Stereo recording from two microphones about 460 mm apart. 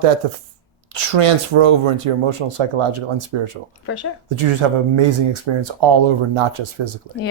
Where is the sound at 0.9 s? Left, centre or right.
Right.